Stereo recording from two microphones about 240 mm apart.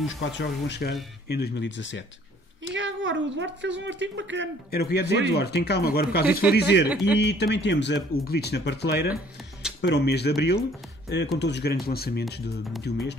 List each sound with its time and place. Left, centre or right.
0.0 s speech: left
2.7 s a woman's voice: right
4.6 s speech: left
6.9 s speech: centre
7.2 s speech: left